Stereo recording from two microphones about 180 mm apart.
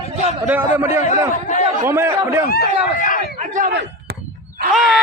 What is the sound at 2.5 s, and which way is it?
Speech, 50° left (ahead or behind).